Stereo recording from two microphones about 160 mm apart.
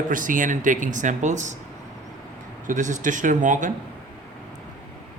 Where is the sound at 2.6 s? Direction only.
50° right (ahead or behind).